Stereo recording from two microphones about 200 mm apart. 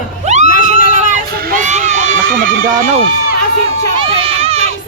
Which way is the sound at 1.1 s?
45° right (ahead or behind).